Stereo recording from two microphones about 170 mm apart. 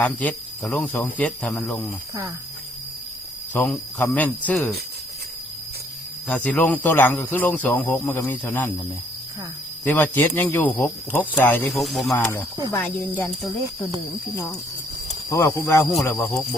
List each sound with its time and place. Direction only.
0.0 s speech: 10° left (ahead or behind)
3.5 s speech: 10° left (ahead or behind)
6.2 s speech: 5° left (ahead or behind)
9.8 s speech: 10° left (ahead or behind)
11.7 s speech: centre (ahead or behind)
15.3 s speech: 15° left (ahead or behind)